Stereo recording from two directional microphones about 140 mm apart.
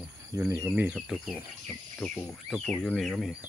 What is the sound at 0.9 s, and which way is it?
Speech, centre (ahead or behind).